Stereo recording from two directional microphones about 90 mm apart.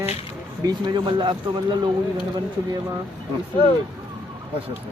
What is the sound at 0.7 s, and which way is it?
Speech, 55° right (ahead or behind).